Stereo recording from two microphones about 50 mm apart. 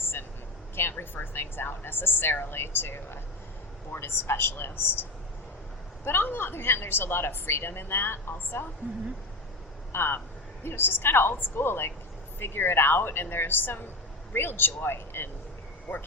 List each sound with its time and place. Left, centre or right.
0.0 s vehicle: left
0.8 s a woman's voice: left
6.1 s a woman's voice: left
9.9 s a woman's voice: left